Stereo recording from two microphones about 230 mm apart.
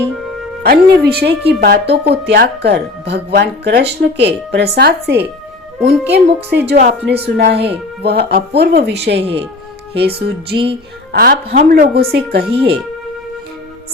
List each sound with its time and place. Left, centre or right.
0.6 s speech: right